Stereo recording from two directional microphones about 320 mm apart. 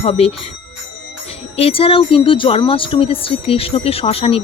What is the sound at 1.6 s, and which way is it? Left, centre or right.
Speech, centre.